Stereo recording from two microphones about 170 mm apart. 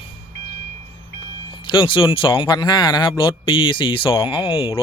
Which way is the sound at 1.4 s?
30° left (ahead or behind).